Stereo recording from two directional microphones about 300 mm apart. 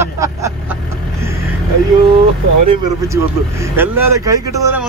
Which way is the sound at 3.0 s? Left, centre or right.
Centre.